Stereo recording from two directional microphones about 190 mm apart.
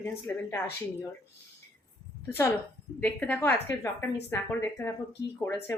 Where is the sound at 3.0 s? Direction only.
5° left (ahead or behind).